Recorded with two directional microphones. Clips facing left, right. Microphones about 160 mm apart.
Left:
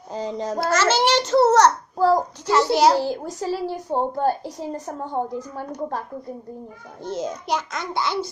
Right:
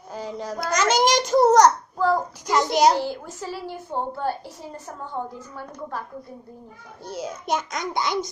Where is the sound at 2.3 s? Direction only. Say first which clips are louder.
Left 2 dB; 15° right (ahead or behind).